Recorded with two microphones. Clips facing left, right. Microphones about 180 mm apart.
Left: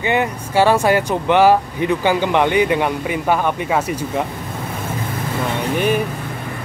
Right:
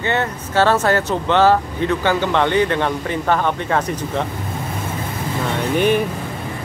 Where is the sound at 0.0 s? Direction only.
15° left (ahead or behind).